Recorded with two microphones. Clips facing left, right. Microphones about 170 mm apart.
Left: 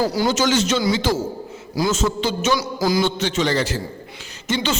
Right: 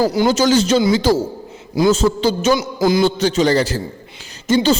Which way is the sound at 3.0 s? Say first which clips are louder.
Right 5 dB; 35° right (ahead or behind).